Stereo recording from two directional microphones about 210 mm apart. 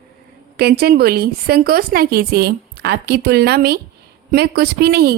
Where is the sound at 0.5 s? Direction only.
45° right (ahead or behind).